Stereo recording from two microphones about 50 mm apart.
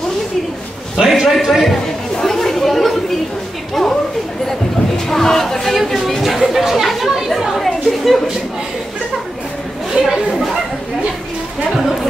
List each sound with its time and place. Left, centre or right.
0.9 s a man's voice: centre
2.1 s chatter: centre
4.5 s a sound: centre
5.9 s chatter: centre
9.9 s chatter: right